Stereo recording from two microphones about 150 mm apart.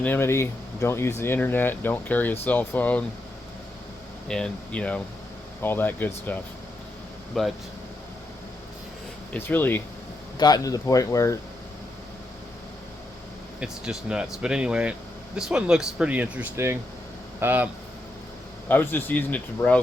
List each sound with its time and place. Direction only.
0.0 s speech: 15° left (ahead or behind)
4.3 s speech: 5° left (ahead or behind)
7.3 s speech: centre (ahead or behind)
9.3 s speech: 10° left (ahead or behind)
10.3 s speech: 25° left (ahead or behind)
13.6 s speech: 5° right (ahead or behind)
18.7 s speech: 15° left (ahead or behind)